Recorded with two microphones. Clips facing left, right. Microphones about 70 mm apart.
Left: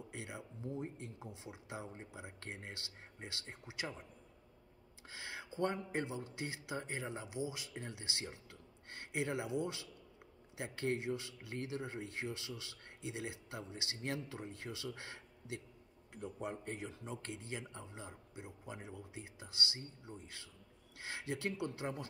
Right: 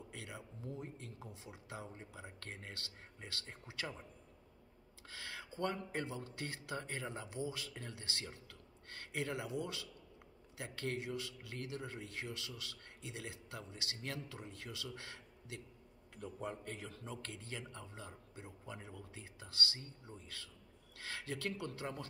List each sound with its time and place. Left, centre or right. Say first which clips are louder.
0.1 s a man's voice: left 2 dB; left
5.0 s a man's voice: left 1 dB; left